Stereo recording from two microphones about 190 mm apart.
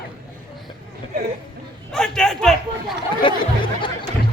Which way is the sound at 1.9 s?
5° left (ahead or behind).